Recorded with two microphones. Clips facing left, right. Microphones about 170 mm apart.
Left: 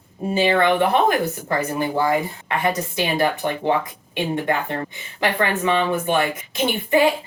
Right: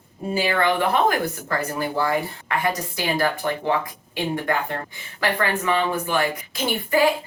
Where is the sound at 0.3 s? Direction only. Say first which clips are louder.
Left 4 dB; 25° left (ahead or behind).